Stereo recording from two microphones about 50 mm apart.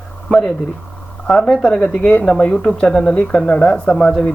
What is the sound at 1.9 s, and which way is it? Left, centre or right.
Speech, left.